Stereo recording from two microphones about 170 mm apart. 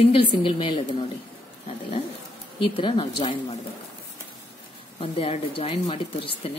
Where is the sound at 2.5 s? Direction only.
30° left (ahead or behind).